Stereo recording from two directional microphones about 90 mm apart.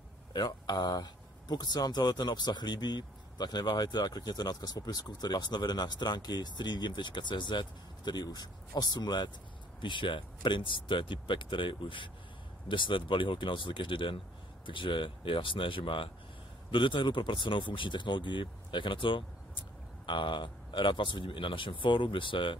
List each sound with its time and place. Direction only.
0.3 s speech: 50° left (ahead or behind)
9.8 s speech: 65° left (ahead or behind)